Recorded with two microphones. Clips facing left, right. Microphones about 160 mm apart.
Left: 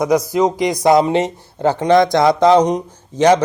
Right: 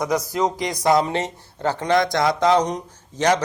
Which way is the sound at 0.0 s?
15° left (ahead or behind).